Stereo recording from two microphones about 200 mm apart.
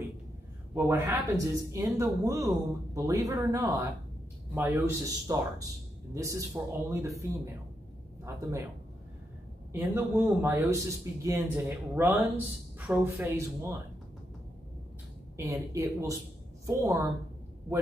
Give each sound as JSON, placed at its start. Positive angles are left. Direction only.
{"t": 0.7, "sound": "a man's voice", "side_deg": -10}
{"t": 9.7, "sound": "speech", "side_deg": -10}
{"t": 15.3, "sound": "speech", "side_deg": -15}